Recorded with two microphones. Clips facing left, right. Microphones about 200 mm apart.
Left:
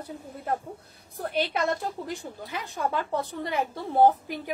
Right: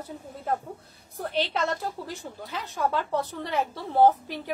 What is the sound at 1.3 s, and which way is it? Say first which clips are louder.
A woman's voice: left 1 dB; 10° left (ahead or behind).